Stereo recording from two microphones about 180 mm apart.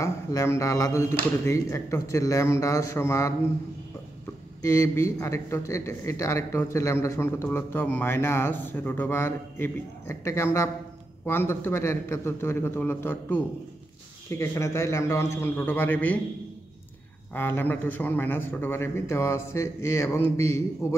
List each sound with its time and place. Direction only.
0.0 s a man's voice: 15° left (ahead or behind)
4.6 s a man's voice: 15° left (ahead or behind)
17.3 s a man's voice: 10° left (ahead or behind)